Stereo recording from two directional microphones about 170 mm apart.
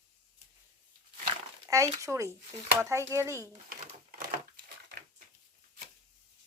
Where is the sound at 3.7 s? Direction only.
55° right (ahead or behind).